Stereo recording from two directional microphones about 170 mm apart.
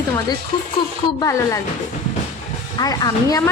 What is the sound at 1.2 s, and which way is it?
Speech, 20° left (ahead or behind).